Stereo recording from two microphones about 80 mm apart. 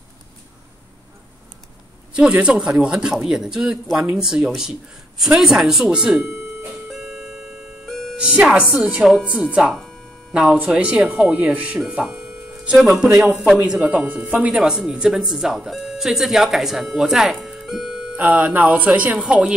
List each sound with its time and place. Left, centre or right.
2.1 s speech: centre
6.9 s music: centre
7.8 s music: centre
8.2 s speech: centre
11.9 s music: centre
12.7 s speech: centre
14.5 s speech: centre
17.3 s music: centre
18.1 s speech: right